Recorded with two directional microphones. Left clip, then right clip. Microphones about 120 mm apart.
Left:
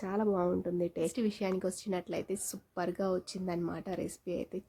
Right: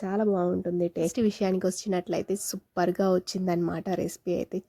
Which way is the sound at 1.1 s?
55° right (ahead or behind).